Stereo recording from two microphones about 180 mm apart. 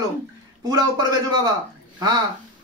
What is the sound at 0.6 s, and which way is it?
Speech, 20° right (ahead or behind).